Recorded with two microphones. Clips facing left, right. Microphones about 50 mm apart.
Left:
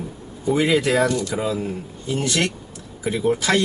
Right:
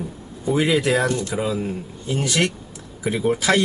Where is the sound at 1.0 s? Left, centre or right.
Right.